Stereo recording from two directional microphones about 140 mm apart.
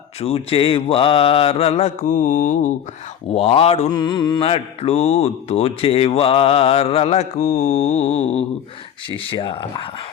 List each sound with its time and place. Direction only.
0.2 s speech: 45° left (ahead or behind); by 2.6 s 65° left (ahead or behind)
3.3 s speech: 45° left (ahead or behind)
3.9 s mantra: 30° left (ahead or behind)
4.4 s speech: 45° left (ahead or behind)